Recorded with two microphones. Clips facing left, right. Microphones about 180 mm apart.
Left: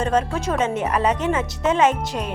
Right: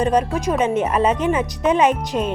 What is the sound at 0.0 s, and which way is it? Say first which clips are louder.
Speech: right 3 dB; 15° right (ahead or behind).